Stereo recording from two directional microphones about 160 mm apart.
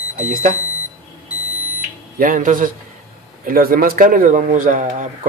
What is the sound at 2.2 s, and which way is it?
Speech, 55° right (ahead or behind).